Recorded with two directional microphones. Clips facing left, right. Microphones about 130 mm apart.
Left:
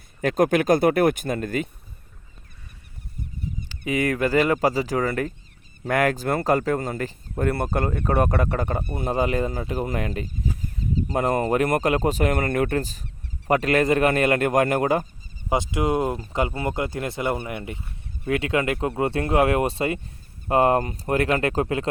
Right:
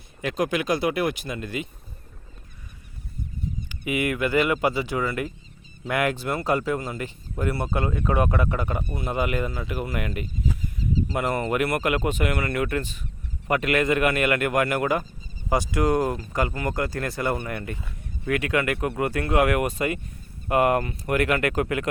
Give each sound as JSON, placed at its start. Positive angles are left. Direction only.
{"t": 0.2, "sound": "speech", "side_deg": 50}
{"t": 3.7, "sound": "speech", "side_deg": 35}
{"t": 15.4, "sound": "speech", "side_deg": 20}